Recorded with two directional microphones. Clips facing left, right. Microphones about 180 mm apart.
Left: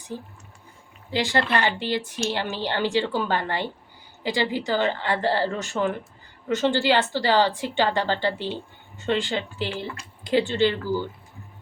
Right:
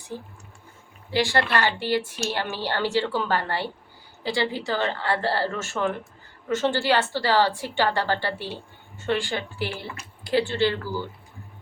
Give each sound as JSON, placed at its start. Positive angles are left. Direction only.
{"t": 1.1, "sound": "a woman's voice", "side_deg": 20}